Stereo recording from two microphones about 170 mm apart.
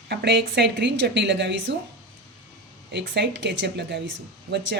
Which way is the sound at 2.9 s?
90° right.